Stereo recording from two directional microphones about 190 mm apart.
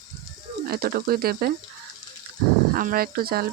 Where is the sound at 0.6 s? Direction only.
55° right (ahead or behind).